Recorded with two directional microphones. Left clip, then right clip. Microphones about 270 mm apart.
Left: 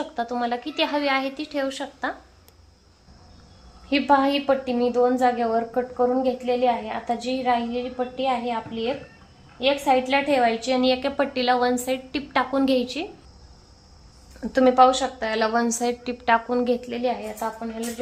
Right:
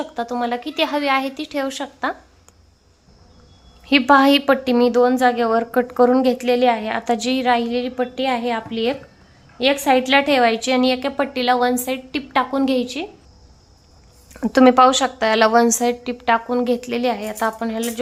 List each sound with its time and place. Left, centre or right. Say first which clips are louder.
0.0 s a woman's voice: right 3 dB; centre
3.8 s a woman's voice: right 6 dB; right
6.0 s a woman's voice: right 7 dB; right; by 13.1 s centre
14.4 s a woman's voice: right 4 dB; right
17.6 s a woman's voice: right 7 dB; right